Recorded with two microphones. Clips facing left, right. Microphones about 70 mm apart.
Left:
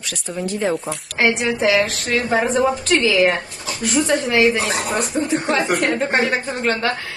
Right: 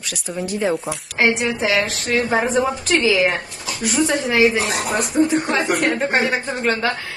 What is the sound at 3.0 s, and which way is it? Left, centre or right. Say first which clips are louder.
Speech: left 1 dB; centre.